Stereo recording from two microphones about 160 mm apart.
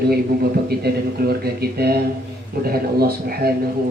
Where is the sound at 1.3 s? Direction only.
75° right (ahead or behind).